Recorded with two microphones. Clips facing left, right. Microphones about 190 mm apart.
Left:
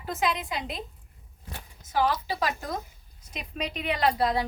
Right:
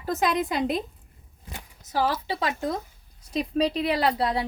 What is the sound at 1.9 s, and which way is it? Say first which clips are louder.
A woman's voice: right 1 dB; 30° right (ahead or behind).